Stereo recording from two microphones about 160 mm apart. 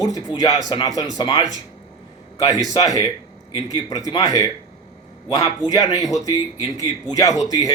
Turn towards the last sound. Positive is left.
turn(degrees=20)  # may be behind; listen again after turning